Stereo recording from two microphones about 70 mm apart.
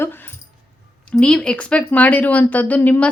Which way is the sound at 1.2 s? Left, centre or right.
Centre.